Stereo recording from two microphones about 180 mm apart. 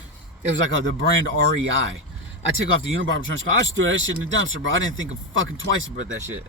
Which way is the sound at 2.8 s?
90° right.